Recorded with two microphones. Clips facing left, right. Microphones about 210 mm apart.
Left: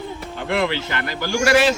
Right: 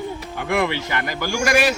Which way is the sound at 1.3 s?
10° right (ahead or behind).